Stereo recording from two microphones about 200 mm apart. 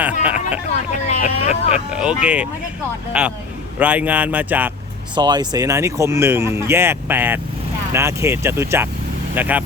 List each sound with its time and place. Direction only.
0.0 s hubbub: 5° right (ahead or behind)
1.0 s speech: 35° left (ahead or behind)
1.9 s speech: 5° right (ahead or behind)
5.1 s speech: 20° right (ahead or behind)